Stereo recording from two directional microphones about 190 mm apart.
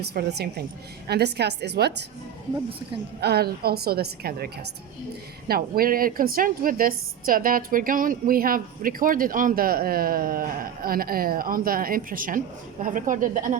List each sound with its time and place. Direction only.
0.0 s a woman's voice: 60° right (ahead or behind)
3.2 s a woman's voice: 55° right (ahead or behind)